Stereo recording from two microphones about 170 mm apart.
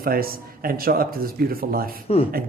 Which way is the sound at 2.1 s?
35° left (ahead or behind).